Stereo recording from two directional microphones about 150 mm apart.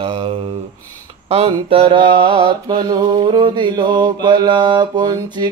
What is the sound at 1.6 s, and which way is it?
Mantra, 35° right (ahead or behind).